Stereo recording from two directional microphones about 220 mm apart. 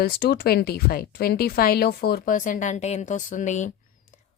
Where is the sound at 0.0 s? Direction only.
45° left (ahead or behind).